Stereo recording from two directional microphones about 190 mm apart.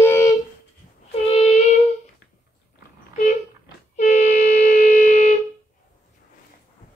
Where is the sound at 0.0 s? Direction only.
15° left (ahead or behind).